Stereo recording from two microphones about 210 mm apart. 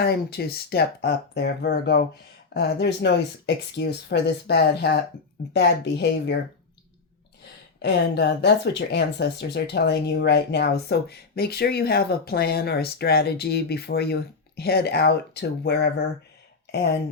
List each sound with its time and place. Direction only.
0.0 s speech: 50° left (ahead or behind)
7.8 s speech: 50° left (ahead or behind)